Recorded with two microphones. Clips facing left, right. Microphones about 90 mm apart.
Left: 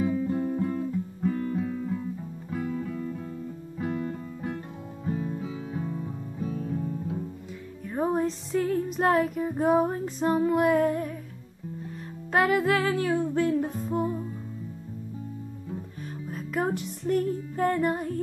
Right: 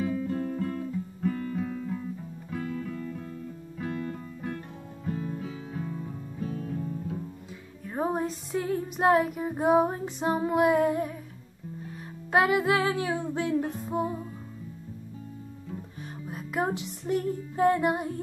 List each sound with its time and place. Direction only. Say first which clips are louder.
0.0 s music: left 3 dB; 15° left (ahead or behind)
7.8 s music: left 3 dB; 15° right (ahead or behind)
12.3 s music: even; 10° right (ahead or behind)
16.3 s music: left 1 dB; 10° right (ahead or behind)